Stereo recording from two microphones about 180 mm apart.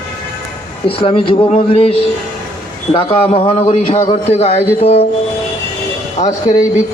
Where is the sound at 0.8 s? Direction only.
30° left (ahead or behind).